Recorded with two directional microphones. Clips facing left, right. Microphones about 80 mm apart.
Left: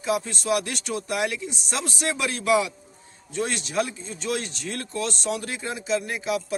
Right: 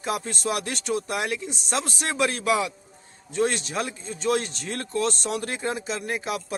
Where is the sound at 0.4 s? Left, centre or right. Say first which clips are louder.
Left 1 dB; right.